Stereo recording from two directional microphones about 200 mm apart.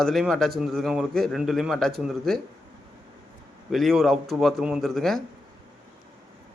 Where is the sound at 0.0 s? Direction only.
Centre (ahead or behind).